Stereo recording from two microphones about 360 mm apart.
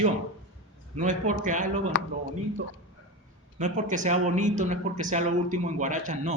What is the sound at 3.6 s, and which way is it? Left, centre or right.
A man's voice, right.